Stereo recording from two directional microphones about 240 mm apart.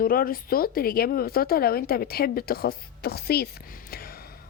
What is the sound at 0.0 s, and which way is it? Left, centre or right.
Speech, left.